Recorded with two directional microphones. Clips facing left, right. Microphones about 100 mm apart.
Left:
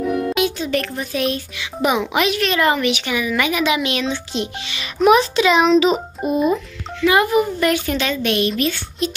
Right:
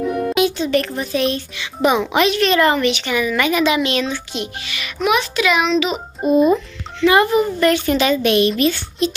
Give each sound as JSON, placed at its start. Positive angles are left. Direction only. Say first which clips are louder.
{"t": 0.3, "sound": "speech", "louder": "right 3 dB", "side_deg": 0}
{"t": 4.1, "sound": "a child's voice", "louder": "left 2 dB", "side_deg": 30}
{"t": 6.2, "sound": "speech", "louder": "right 6 dB", "side_deg": 15}
{"t": 7.0, "sound": "a woman's voice", "louder": "right 2 dB", "side_deg": 5}
{"t": 7.9, "sound": "a woman's voice", "louder": "right 5 dB", "side_deg": -5}